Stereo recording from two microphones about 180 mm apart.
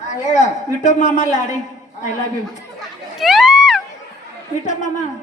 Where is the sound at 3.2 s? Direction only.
Centre (ahead or behind).